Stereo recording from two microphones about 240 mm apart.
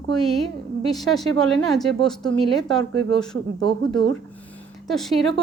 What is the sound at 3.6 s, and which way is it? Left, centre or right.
Speech, right.